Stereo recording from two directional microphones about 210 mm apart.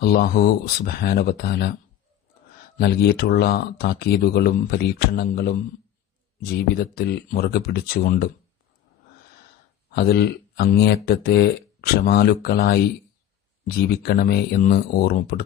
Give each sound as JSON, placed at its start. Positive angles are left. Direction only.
{"t": 0.0, "sound": "speech", "side_deg": 45}
{"t": 2.8, "sound": "speech", "side_deg": 50}
{"t": 9.8, "sound": "speech", "side_deg": 50}